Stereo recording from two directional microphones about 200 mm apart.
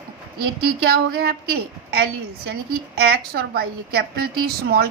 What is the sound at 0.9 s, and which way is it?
A woman's voice, 50° right (ahead or behind).